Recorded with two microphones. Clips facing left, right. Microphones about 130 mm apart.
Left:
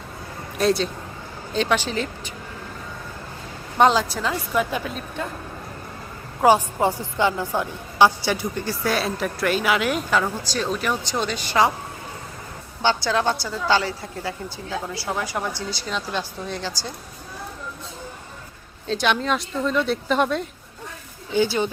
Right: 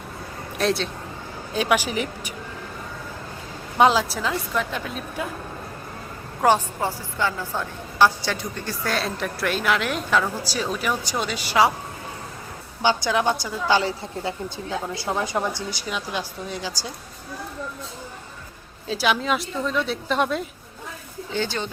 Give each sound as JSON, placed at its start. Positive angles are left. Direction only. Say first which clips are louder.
{"t": 0.6, "sound": "a woman's voice", "louder": "left 3 dB", "side_deg": 0}
{"t": 1.5, "sound": "a woman's voice", "louder": "even", "side_deg": -10}
{"t": 3.8, "sound": "a woman's voice", "louder": "even", "side_deg": 0}
{"t": 6.4, "sound": "speech", "louder": "left 3 dB", "side_deg": 10}
{"t": 6.7, "sound": "a woman's voice", "louder": "left 5 dB", "side_deg": 20}
{"t": 12.8, "sound": "a woman's voice", "louder": "even", "side_deg": -15}
{"t": 18.9, "sound": "a woman's voice", "louder": "left 1 dB", "side_deg": -5}
{"t": 21.3, "sound": "speech", "louder": "left 6 dB", "side_deg": 10}